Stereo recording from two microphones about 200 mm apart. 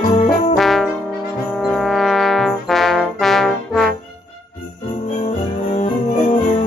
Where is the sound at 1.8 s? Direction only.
Centre (ahead or behind).